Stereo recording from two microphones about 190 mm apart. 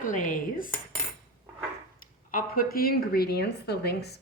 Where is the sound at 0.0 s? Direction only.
45° left (ahead or behind).